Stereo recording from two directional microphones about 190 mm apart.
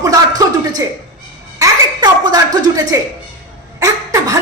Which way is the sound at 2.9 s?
15° right (ahead or behind).